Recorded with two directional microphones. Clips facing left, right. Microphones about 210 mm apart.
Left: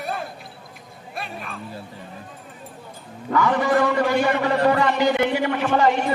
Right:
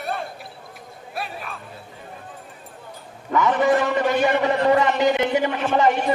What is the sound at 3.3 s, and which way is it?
A man's voice, 20° right (ahead or behind).